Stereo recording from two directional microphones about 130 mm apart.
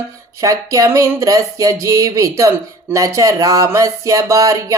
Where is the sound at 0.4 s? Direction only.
25° right (ahead or behind).